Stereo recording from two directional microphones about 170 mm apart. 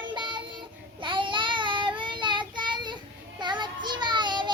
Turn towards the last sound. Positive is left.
turn(degrees=-25)  # may be behind; listen again after turning